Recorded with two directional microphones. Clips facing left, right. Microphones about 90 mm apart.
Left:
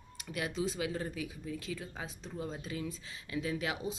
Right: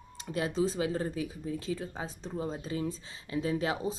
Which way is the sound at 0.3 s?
35° right (ahead or behind).